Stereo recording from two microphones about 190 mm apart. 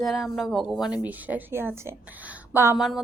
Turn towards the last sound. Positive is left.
turn(degrees=0)  # may be behind; listen again after turning